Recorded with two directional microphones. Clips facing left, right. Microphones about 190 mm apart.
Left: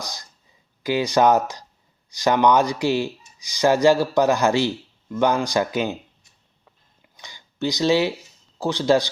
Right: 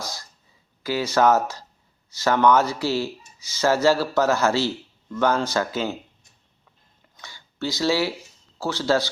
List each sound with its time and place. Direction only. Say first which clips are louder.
0.0 s a sound: right 1 dB; 15° left (ahead or behind)
0.8 s speech: left 2 dB; 15° left (ahead or behind)
7.2 s speech: left 4 dB; 15° left (ahead or behind)